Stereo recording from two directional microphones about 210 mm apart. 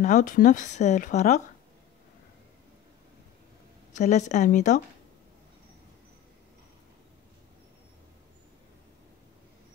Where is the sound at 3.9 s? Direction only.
35° left (ahead or behind).